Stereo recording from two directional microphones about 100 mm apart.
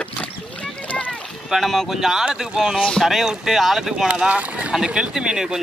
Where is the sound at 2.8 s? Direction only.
10° left (ahead or behind).